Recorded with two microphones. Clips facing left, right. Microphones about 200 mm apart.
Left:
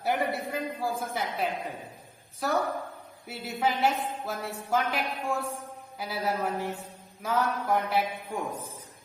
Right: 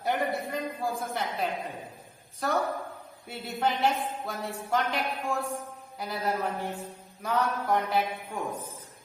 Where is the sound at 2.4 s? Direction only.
Centre (ahead or behind).